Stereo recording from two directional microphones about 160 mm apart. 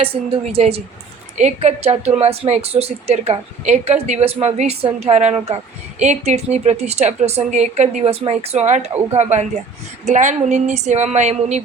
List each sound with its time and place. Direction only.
0.0 s a woman's voice: 35° right (ahead or behind)